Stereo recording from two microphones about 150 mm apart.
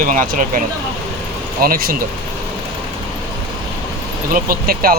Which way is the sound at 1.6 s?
75° right (ahead or behind).